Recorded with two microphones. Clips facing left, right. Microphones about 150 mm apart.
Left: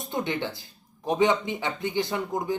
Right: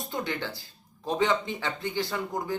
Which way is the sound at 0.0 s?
20° left (ahead or behind).